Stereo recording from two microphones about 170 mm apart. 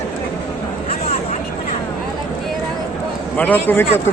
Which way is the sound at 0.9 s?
40° left (ahead or behind).